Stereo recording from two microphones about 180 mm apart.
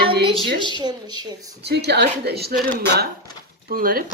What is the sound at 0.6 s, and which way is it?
Speech, 25° right (ahead or behind).